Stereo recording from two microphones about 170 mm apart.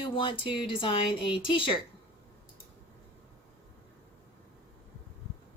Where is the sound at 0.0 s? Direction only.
30° left (ahead or behind).